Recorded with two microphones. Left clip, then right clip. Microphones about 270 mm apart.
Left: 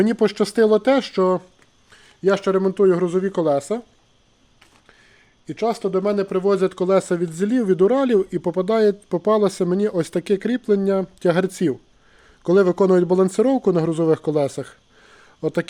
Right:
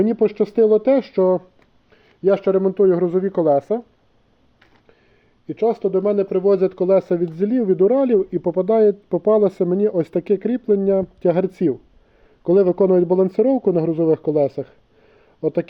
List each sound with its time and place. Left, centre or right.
0.0 s speech: left; by 3.8 s centre
5.5 s speech: left